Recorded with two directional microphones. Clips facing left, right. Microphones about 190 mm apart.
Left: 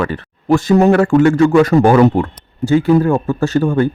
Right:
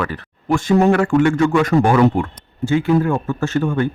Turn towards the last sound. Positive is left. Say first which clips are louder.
# left 5 dB
turn(degrees=35)  # may be behind; listen again after turning